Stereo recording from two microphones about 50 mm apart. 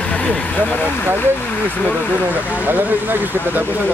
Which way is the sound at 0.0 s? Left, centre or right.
Left.